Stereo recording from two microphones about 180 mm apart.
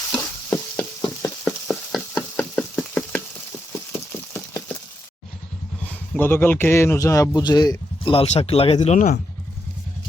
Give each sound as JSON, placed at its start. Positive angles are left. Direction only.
{"t": 0.2, "sound": "frying", "side_deg": 15}
{"t": 1.5, "sound": "knock", "side_deg": 5}
{"t": 3.7, "sound": "a sound", "side_deg": 15}
{"t": 5.8, "sound": "a man's voice", "side_deg": 10}